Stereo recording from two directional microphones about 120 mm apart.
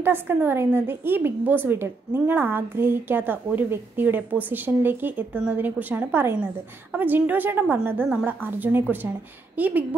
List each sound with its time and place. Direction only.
0.0 s a woman's voice: 20° right (ahead or behind)